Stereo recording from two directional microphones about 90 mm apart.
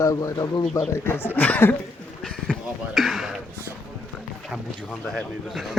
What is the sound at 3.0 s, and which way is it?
Speech, centre (ahead or behind).